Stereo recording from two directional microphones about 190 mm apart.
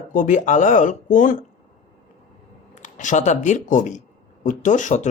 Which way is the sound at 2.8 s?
40° left (ahead or behind).